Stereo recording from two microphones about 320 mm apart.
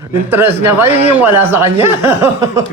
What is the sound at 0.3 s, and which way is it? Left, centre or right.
Speech, centre.